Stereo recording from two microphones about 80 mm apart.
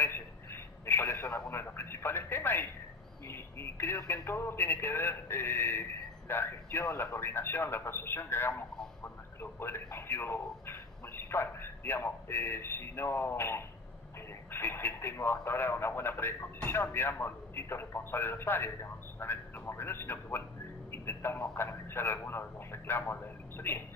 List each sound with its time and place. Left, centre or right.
0.0 s telephone: left
3.3 s speech: left